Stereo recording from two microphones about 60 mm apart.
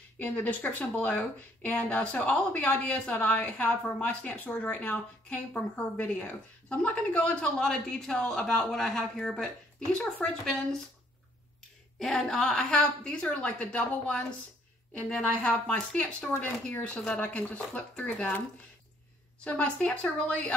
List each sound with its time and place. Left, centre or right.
0.2 s speech: left
7.5 s a woman's voice: centre
12.0 s a woman's voice: centre
15.2 s speech: left
19.4 s speech: centre